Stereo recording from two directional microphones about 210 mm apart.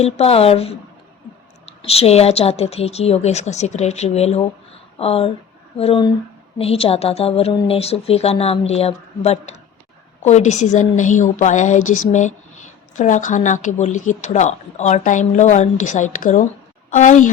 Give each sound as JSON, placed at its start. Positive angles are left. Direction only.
{"t": 0.0, "sound": "a woman's voice", "side_deg": 30}